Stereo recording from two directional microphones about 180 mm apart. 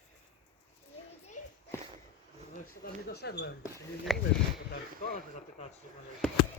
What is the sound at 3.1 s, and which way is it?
Speech, 65° left (ahead or behind).